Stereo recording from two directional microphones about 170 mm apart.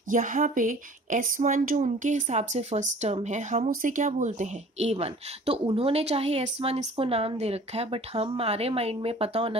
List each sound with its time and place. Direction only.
0.1 s a woman's voice: 50° right (ahead or behind); by 9.6 s 35° right (ahead or behind)